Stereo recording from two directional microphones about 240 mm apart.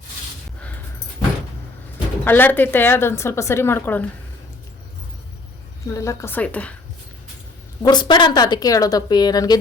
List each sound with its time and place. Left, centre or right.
2.2 s a woman's voice: centre
5.8 s a woman's voice: centre
7.8 s a woman's voice: centre